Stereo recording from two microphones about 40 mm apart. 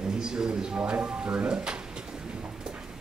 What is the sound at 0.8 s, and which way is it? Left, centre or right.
A man's voice, right.